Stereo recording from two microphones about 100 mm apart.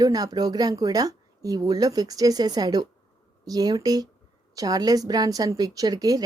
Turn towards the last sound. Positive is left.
turn(degrees=-40)  # may be behind; listen again after turning